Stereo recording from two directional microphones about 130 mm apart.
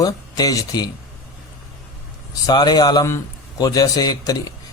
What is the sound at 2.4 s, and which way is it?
A man's voice, 30° left (ahead or behind).